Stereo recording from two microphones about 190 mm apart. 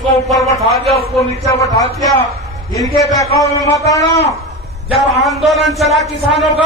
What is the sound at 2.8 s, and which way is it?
Speech, centre (ahead or behind).